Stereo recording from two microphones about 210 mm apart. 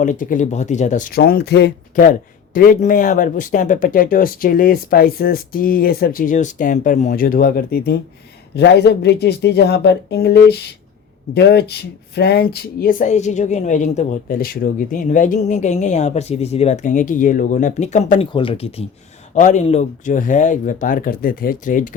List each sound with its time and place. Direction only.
0.0 s speech: 40° left (ahead or behind)